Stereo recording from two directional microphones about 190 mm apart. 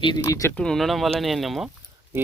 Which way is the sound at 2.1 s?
10° right (ahead or behind).